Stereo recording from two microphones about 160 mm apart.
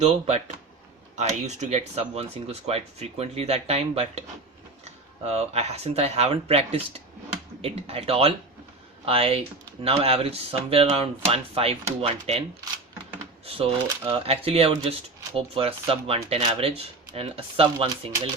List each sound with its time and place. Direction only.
0.0 s speech: 45° right (ahead or behind)
5.2 s speech: 40° right (ahead or behind)